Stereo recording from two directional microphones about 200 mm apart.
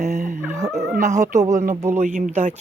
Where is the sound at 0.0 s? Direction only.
35° right (ahead or behind).